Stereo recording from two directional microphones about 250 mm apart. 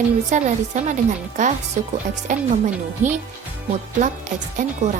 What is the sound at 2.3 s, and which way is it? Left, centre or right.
Speech, right.